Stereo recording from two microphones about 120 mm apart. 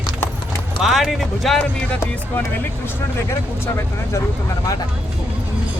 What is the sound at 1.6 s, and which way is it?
Speech, 15° left (ahead or behind).